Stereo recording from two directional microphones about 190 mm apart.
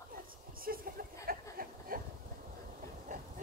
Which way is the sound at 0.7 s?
50° right (ahead or behind).